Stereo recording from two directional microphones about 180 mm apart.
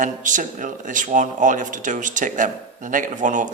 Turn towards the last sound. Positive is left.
turn(degrees=-45)  # may be behind; listen again after turning